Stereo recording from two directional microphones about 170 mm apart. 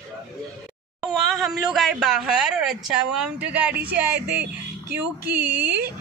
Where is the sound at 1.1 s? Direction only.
Centre (ahead or behind).